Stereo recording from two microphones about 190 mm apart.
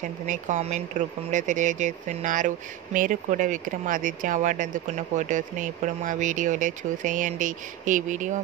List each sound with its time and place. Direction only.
0.3 s speech: 40° right (ahead or behind)